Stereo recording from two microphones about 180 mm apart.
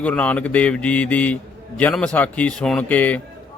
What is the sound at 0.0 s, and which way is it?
Speech, 10° left (ahead or behind).